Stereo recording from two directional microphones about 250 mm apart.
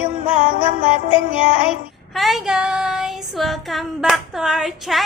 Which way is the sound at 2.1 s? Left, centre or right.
Centre.